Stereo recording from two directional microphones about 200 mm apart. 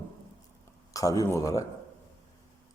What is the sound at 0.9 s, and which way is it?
Speech, 15° left (ahead or behind).